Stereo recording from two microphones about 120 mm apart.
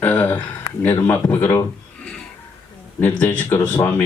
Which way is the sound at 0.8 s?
20° left (ahead or behind).